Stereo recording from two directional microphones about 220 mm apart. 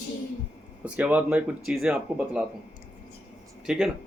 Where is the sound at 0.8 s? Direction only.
5° right (ahead or behind).